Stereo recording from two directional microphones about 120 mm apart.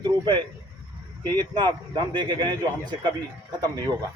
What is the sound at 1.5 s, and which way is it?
A man's voice, 35° right (ahead or behind).